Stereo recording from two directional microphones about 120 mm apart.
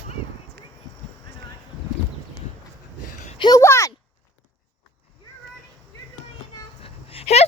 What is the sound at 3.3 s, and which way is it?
Speech, 40° left (ahead or behind).